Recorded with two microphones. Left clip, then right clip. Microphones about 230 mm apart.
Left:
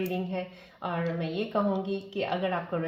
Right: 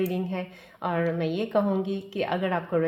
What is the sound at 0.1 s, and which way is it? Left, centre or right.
A woman's voice, right.